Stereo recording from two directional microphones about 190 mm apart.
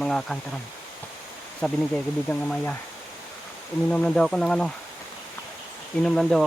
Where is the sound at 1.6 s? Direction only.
5° left (ahead or behind).